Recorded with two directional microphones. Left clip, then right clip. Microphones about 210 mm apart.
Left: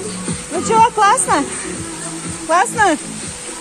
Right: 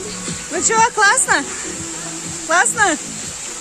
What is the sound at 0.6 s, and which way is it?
Speech, 20° right (ahead or behind).